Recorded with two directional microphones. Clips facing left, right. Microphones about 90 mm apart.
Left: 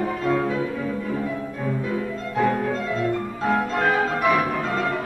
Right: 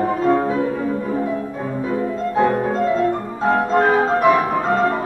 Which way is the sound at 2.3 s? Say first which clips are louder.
Right 4 dB; 35° right (ahead or behind).